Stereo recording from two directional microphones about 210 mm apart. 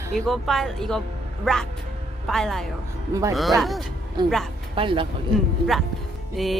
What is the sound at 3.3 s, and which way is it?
Speech, centre (ahead or behind).